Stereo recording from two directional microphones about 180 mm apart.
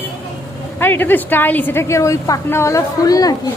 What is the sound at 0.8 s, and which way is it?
A woman's voice, 10° left (ahead or behind).